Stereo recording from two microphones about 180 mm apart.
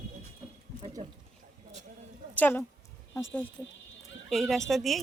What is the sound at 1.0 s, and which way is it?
Speech, 40° right (ahead or behind).